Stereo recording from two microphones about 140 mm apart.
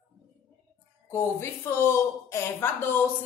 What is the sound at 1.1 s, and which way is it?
A woman's voice, 15° left (ahead or behind).